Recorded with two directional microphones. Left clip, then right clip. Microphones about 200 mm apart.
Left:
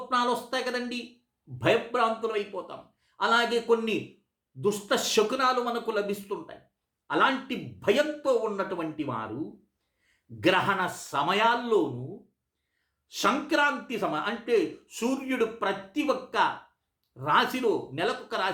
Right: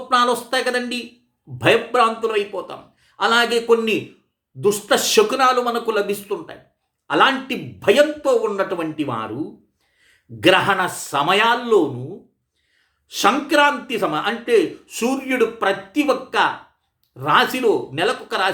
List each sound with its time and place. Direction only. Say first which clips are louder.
0.1 s speech: right 10 dB; 10° right (ahead or behind)
10.4 s speech: right 9 dB; 10° right (ahead or behind)
13.1 s speech: right 9 dB; 10° right (ahead or behind)